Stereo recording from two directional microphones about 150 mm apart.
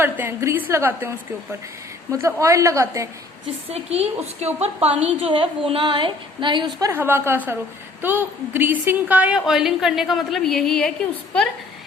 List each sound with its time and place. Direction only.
0.0 s a woman's voice: 15° right (ahead or behind)
2.1 s a woman's voice: 20° right (ahead or behind)
3.7 s a woman's voice: 45° right (ahead or behind)
6.7 s a woman's voice: 20° right (ahead or behind); by 10.9 s 5° left (ahead or behind)